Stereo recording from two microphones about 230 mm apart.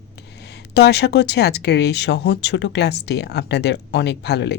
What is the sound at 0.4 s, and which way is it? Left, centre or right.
Speech, left.